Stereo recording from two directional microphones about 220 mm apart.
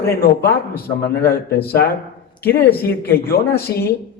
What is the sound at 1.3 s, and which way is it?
Speech, 45° left (ahead or behind).